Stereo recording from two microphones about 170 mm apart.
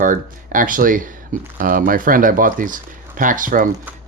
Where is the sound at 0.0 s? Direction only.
55° right (ahead or behind).